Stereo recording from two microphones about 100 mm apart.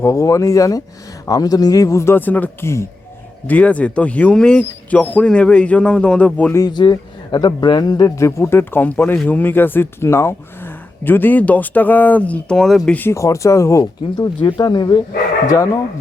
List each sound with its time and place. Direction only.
0.0 s speech: 30° left (ahead or behind); by 6.5 s 15° left (ahead or behind)
6.7 s speech: 45° left (ahead or behind); by 12.9 s 5° left (ahead or behind)
12.9 s speech: 20° left (ahead or behind)
13.1 s speech: 30° left (ahead or behind)
14.6 s speech: 45° left (ahead or behind)
15.4 s speech: 30° left (ahead or behind)